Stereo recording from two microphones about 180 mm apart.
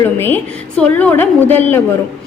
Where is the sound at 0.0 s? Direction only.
10° left (ahead or behind).